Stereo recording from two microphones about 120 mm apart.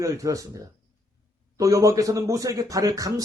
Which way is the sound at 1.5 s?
25° right (ahead or behind).